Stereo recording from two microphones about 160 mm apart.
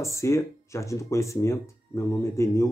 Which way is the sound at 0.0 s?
20° left (ahead or behind).